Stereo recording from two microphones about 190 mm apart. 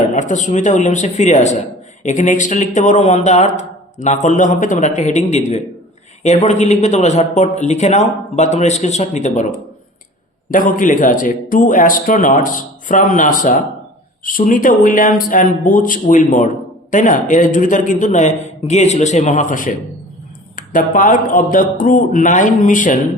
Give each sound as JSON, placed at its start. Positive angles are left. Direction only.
{"t": 0.1, "sound": "speech", "side_deg": 40}
{"t": 10.8, "sound": "speech", "side_deg": 45}